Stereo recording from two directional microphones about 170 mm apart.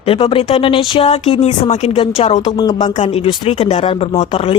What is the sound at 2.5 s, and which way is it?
Speech, 25° left (ahead or behind).